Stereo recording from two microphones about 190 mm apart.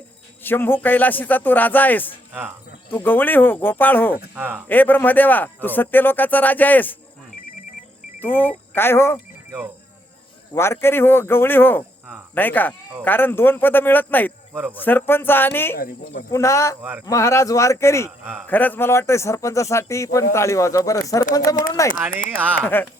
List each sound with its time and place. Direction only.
0.4 s speech: 10° left (ahead or behind)
4.4 s speech: 10° right (ahead or behind)
4.7 s speech: 10° left (ahead or behind)
8.2 s speech: 10° left (ahead or behind)
10.5 s speech: 15° left (ahead or behind)
14.5 s speech: 10° right (ahead or behind)
14.8 s speech: 10° left (ahead or behind)
22.1 s speech: 50° left (ahead or behind)
22.6 s speech: 10° left (ahead or behind)